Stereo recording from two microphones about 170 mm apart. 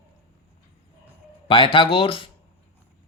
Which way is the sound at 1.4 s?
30° left (ahead or behind).